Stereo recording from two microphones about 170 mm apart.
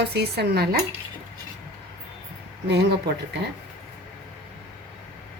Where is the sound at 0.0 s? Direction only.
75° right (ahead or behind).